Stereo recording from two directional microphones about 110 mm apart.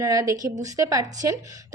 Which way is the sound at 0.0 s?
30° right (ahead or behind).